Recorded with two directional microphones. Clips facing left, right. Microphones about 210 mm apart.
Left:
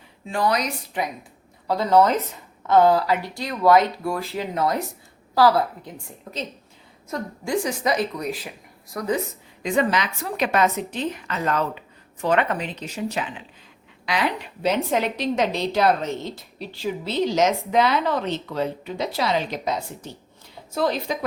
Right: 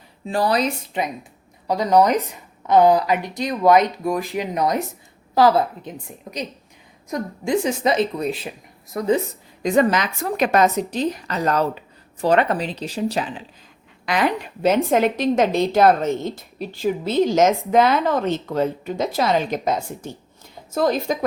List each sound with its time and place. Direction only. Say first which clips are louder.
0.3 s a woman's voice: right 3 dB; 35° right (ahead or behind)
1.6 s a woman's voice: right 1 dB; 15° right (ahead or behind)
9.6 s a woman's voice: right 4 dB; 45° right (ahead or behind)
14.0 s a woman's voice: right 4 dB; 50° right (ahead or behind)